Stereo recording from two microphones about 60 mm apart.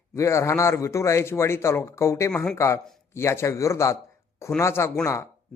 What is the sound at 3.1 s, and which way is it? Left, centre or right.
Speech, left.